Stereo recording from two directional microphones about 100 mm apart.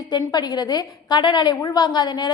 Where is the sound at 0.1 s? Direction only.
45° left (ahead or behind).